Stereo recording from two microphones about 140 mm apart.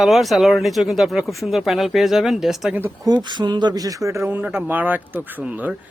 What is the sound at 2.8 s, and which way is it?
Speech, 20° right (ahead or behind).